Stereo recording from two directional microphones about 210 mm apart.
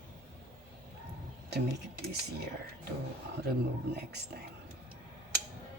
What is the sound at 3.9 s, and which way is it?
Speech, 50° right (ahead or behind).